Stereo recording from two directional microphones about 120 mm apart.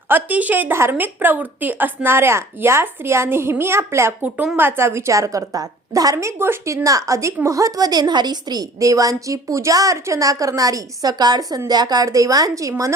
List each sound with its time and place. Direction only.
0.1 s a woman's voice: 15° right (ahead or behind)